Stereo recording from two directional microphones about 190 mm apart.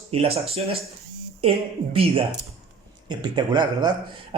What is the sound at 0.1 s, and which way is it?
Speech, 30° right (ahead or behind).